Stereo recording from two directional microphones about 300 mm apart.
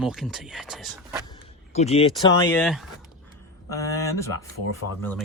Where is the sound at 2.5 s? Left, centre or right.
Centre.